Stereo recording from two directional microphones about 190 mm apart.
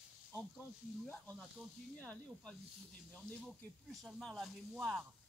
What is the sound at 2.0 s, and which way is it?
Speech, 5° left (ahead or behind).